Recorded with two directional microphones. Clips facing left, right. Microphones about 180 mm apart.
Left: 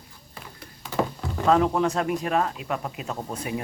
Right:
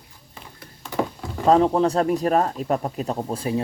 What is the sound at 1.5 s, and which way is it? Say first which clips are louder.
Speech: right 4 dB; 30° right (ahead or behind).